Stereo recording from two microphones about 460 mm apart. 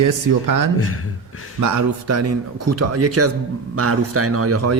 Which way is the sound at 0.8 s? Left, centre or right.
Left.